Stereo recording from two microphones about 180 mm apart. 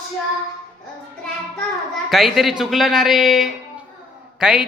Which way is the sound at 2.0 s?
Centre (ahead or behind).